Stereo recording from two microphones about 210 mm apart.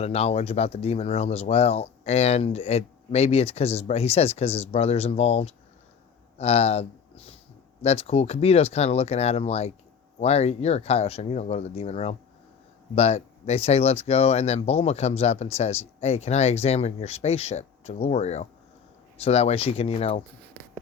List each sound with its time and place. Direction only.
0.0 s speech: 30° left (ahead or behind)